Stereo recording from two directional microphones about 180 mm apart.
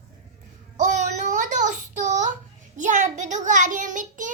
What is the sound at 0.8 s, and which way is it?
Child singing, 40° right (ahead or behind).